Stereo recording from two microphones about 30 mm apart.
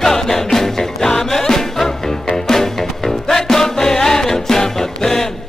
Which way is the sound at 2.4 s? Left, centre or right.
Centre.